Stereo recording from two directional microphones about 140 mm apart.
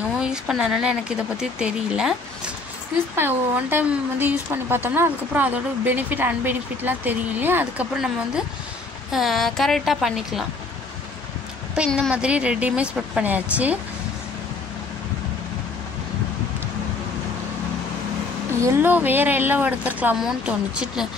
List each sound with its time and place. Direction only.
0.2 s a woman's voice: 5° right (ahead or behind)
9.1 s speech: centre (ahead or behind)
11.8 s a woman's voice: 5° right (ahead or behind)
18.6 s a woman's voice: 15° right (ahead or behind)